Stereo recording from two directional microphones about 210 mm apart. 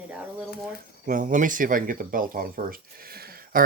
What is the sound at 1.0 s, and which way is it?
Speech, 40° right (ahead or behind).